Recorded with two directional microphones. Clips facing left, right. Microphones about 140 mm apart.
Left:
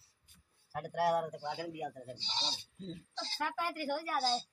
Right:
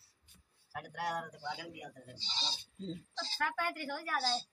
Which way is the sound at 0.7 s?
45° left (ahead or behind).